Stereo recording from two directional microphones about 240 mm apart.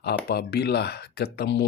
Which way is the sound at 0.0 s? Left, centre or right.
Left.